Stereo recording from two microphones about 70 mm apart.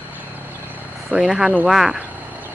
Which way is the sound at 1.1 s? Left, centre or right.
Centre.